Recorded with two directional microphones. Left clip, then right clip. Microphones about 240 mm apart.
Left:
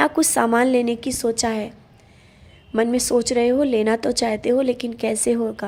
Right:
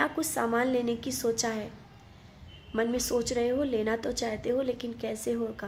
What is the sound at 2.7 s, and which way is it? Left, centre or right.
A woman's voice, left.